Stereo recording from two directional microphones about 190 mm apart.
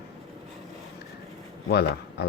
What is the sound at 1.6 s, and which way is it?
Speech, 60° left (ahead or behind).